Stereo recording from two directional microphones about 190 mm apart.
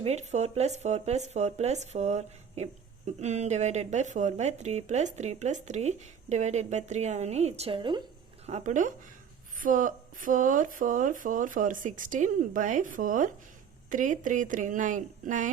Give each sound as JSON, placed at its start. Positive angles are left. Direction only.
{"t": 0.0, "sound": "speech", "side_deg": -35}
{"t": 8.4, "sound": "speech", "side_deg": -40}